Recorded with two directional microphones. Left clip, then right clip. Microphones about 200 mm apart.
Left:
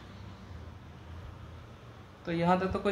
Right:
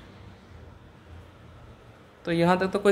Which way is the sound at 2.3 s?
55° right (ahead or behind).